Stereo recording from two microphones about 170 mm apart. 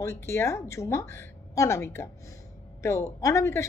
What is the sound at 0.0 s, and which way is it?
A woman's voice, 15° left (ahead or behind).